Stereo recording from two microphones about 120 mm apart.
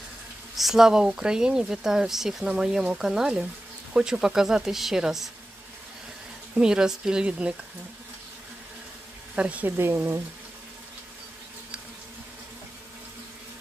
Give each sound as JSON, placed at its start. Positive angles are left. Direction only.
{"t": 0.6, "sound": "speech", "side_deg": -5}
{"t": 6.5, "sound": "speech", "side_deg": -5}
{"t": 9.3, "sound": "speech", "side_deg": -10}